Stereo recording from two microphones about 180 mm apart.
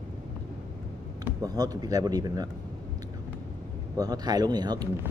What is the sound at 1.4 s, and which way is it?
Speech, 20° right (ahead or behind).